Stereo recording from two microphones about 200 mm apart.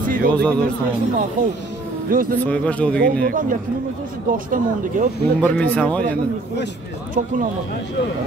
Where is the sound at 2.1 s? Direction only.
45° right (ahead or behind).